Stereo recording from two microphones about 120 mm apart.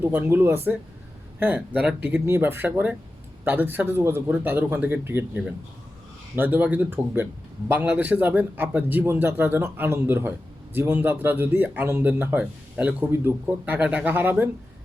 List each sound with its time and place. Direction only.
0.0 s speech: 20° right (ahead or behind)